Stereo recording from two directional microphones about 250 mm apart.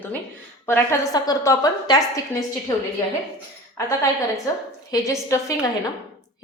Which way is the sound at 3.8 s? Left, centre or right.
Centre.